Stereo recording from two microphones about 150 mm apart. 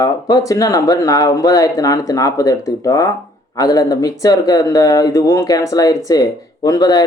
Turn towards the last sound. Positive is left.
turn(degrees=25)  # may be behind; listen again after turning